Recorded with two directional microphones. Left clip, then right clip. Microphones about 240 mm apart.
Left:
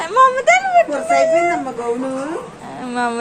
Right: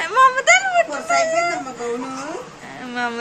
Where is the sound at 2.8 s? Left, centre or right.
Centre.